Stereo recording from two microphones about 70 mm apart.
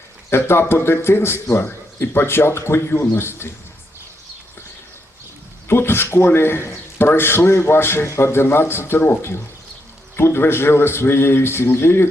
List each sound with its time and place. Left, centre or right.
0.3 s a man's voice: left
5.6 s a man's voice: left